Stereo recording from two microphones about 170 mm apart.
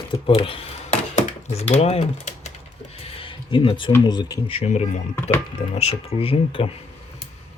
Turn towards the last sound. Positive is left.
turn(degrees=35)  # may be behind; listen again after turning